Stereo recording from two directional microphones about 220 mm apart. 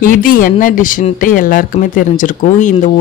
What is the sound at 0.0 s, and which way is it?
Speech, 40° left (ahead or behind).